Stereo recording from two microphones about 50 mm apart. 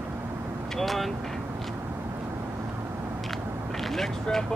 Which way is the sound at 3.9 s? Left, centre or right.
Centre.